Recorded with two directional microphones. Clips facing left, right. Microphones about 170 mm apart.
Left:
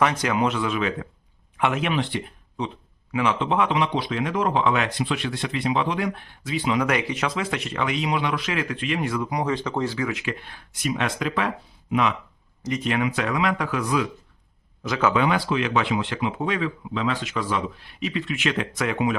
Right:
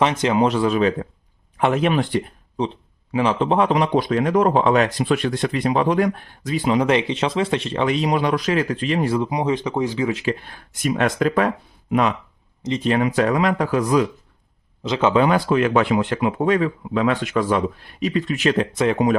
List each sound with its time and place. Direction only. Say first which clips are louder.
0.0 s a man's voice: right 4 dB; 25° right (ahead or behind); by 6.8 s 40° right (ahead or behind)
6.8 s speech: right 5 dB; 25° right (ahead or behind)
10.1 s speech: right 6 dB; 35° right (ahead or behind)
10.8 s a man's voice: right 6 dB; 45° right (ahead or behind)
12.6 s speech: right 5 dB; 30° right (ahead or behind)
14.8 s speech: right 4 dB; 25° right (ahead or behind)
15.2 s a man's voice: right 5 dB; 45° right (ahead or behind)